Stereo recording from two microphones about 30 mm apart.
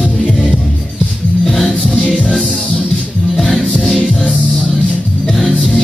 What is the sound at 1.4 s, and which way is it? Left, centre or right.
Music, centre.